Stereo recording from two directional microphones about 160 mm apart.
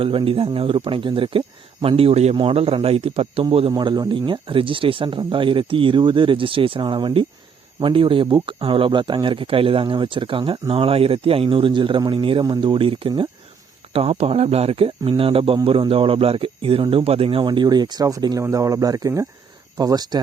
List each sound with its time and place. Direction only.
0.0 s speech: 35° right (ahead or behind)
3.7 s speech: 25° right (ahead or behind)